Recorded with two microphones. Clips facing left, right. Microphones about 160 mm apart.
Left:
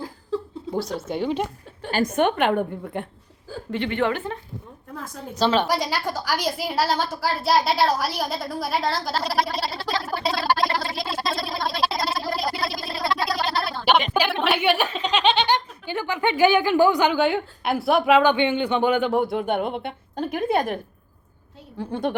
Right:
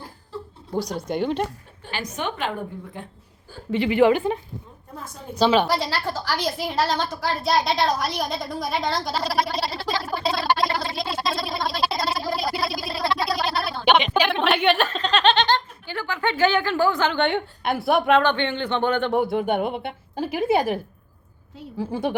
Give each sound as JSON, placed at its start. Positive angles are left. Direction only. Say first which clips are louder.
{"t": 0.7, "sound": "speech", "louder": "right 1 dB", "side_deg": 0}
{"t": 1.9, "sound": "a woman's voice", "louder": "left 8 dB", "side_deg": 50}
{"t": 3.7, "sound": "a woman's voice", "louder": "right 6 dB", "side_deg": -5}
{"t": 5.4, "sound": "speech", "louder": "right 2 dB", "side_deg": 0}
{"t": 5.6, "sound": "a woman's voice", "louder": "even", "side_deg": 15}
{"t": 21.8, "sound": "speech", "louder": "even", "side_deg": -5}